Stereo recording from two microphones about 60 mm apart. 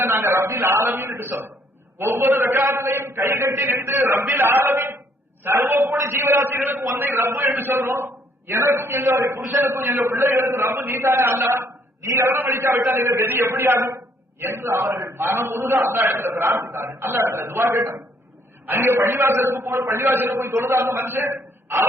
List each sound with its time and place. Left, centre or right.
0.0 s a man's voice: right
14.8 s a man's voice: right
15.1 s a man's voice: right
18.6 s a man's voice: right